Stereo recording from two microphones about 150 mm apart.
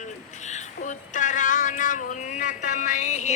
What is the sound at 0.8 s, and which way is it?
Speech, 55° left (ahead or behind).